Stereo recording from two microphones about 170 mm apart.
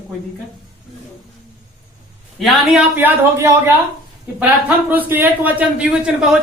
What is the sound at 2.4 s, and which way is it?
Speech, centre (ahead or behind).